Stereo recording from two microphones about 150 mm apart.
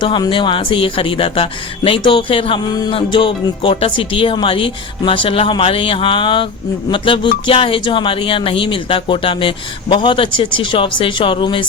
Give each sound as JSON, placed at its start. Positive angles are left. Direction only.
{"t": 0.0, "sound": "speech", "side_deg": 30}